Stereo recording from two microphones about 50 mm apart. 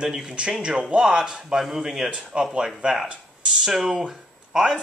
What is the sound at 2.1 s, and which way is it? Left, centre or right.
Speech, centre.